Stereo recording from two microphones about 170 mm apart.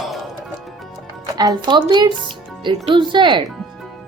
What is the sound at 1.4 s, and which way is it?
Speech, 25° right (ahead or behind).